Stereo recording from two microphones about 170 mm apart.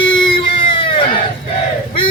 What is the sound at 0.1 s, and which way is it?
Baby cry, 30° left (ahead or behind).